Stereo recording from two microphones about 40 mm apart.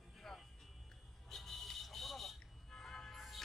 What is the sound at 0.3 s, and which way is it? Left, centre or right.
Music, centre.